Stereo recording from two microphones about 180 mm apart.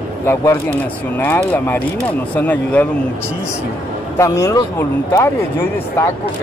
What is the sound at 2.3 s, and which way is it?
Speech, 10° left (ahead or behind).